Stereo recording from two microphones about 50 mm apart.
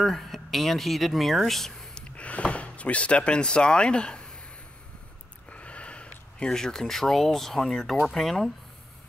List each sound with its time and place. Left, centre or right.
0.0 s speech: centre
2.0 s speech: left
5.5 s a sound: left
6.5 s speech: centre